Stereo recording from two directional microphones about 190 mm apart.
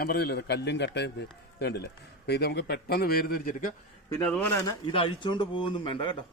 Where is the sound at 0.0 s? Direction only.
55° left (ahead or behind).